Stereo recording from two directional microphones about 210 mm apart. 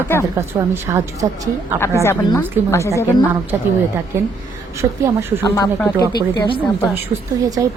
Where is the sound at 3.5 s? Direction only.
15° right (ahead or behind).